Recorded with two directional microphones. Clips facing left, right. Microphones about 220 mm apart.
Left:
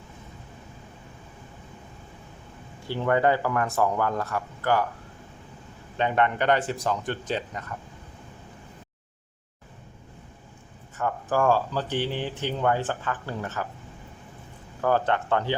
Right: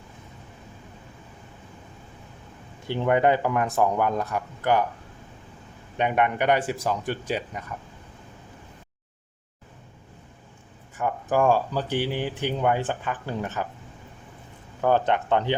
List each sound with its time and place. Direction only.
2.9 s speech: 20° right (ahead or behind)
6.0 s speech: 15° right (ahead or behind)
10.9 s speech: 15° right (ahead or behind)
14.8 s speech: 20° right (ahead or behind)